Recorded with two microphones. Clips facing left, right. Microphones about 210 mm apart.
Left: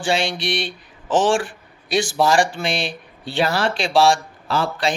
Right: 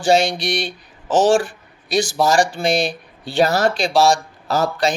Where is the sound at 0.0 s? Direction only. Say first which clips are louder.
Right 5 dB; 40° right (ahead or behind).